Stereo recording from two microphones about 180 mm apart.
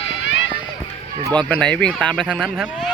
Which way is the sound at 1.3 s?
5° left (ahead or behind).